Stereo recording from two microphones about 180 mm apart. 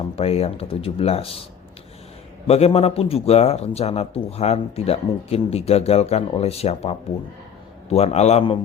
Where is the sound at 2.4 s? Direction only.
35° left (ahead or behind).